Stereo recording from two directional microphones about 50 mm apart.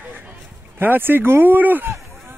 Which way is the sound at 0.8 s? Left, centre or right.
Right.